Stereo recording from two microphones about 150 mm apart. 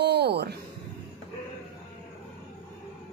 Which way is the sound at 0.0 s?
90° right.